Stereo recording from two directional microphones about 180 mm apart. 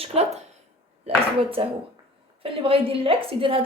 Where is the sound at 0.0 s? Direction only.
35° right (ahead or behind).